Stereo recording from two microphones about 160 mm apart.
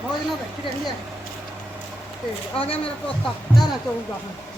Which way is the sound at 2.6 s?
35° left (ahead or behind).